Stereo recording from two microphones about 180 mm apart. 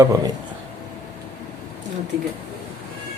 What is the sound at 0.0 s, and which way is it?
Speech, 20° right (ahead or behind).